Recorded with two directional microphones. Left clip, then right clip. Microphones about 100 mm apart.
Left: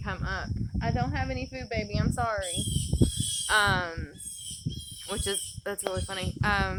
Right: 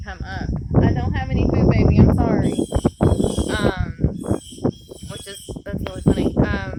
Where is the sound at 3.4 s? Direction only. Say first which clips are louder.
Right 1 dB; 25° left (ahead or behind).